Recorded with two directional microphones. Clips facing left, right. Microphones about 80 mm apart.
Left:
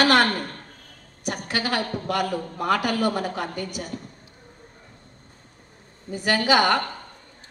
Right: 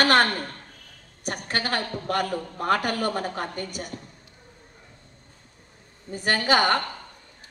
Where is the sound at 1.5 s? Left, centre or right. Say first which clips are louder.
Left 2 dB; right.